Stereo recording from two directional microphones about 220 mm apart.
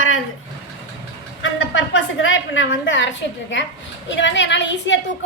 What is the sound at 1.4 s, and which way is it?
A woman's voice, 60° left (ahead or behind).